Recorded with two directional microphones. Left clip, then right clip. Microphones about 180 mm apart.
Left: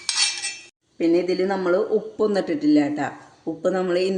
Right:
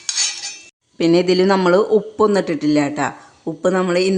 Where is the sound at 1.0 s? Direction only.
50° right (ahead or behind).